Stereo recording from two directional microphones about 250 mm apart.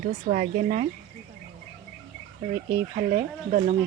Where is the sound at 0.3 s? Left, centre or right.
Right.